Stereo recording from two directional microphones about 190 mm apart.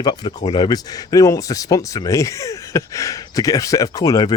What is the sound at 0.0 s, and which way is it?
Speech, 20° left (ahead or behind).